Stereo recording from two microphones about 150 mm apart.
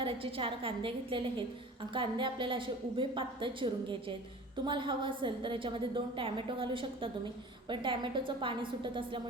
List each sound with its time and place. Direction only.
0.0 s a woman's voice: 35° right (ahead or behind)